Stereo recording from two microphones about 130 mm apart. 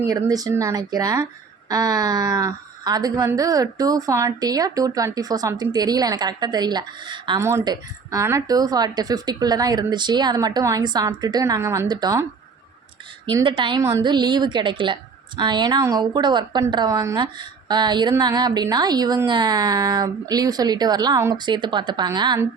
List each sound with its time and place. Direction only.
0.1 s speech: 30° right (ahead or behind)
7.3 s speech: 20° right (ahead or behind)
7.6 s speech: 30° right (ahead or behind)
8.2 s speech: 20° right (ahead or behind)
13.4 s speech: 40° right (ahead or behind)